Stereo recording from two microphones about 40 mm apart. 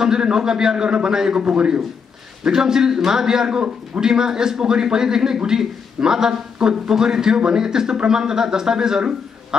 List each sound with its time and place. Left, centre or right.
0.0 s a man's voice: centre